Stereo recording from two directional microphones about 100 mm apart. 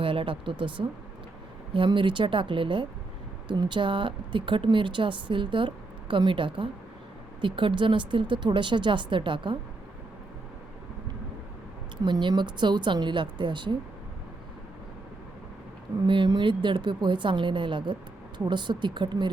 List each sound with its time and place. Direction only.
0.0 s speech: 65° right (ahead or behind)
0.8 s a woman's voice: 50° right (ahead or behind)
12.0 s a woman's voice: 45° right (ahead or behind)
16.0 s a woman's voice: 55° right (ahead or behind)